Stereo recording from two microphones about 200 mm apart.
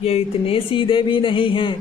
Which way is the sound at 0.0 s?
30° left (ahead or behind).